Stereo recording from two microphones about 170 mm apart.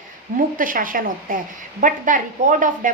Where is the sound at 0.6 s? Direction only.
55° right (ahead or behind).